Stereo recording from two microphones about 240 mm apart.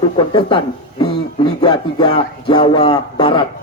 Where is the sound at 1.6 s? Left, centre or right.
Left.